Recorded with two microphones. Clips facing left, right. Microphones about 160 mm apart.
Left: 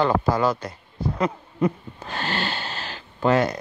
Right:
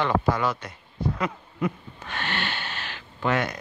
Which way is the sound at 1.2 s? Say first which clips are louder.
Left 9 dB; 35° left (ahead or behind).